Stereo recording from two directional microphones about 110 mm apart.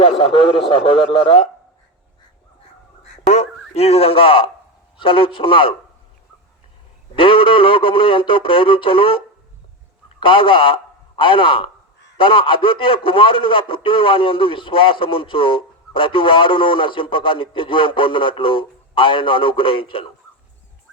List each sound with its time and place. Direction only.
0.0 s a man's voice: 60° left (ahead or behind)
3.2 s a man's voice: 80° left; by 5.7 s 55° left (ahead or behind)
7.2 s a man's voice: 55° left (ahead or behind)